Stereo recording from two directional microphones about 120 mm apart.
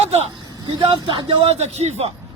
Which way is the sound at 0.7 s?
45° right (ahead or behind).